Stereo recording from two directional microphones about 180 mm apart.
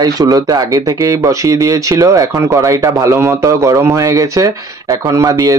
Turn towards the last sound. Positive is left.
turn(degrees=-20)  # may be behind; listen again after turning